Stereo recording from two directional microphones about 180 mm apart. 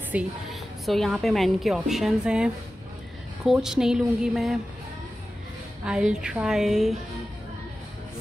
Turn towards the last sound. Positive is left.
turn(degrees=0)  # may be behind; listen again after turning